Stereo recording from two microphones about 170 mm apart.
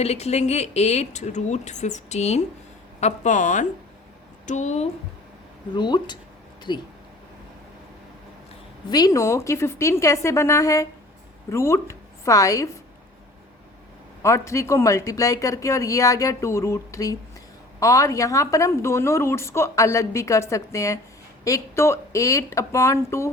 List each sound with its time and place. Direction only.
0.0 s a woman's voice: 40° left (ahead or behind)
5.7 s speech: 25° left (ahead or behind)
8.9 s a woman's voice: 20° left (ahead or behind)
14.2 s a woman's voice: 15° left (ahead or behind)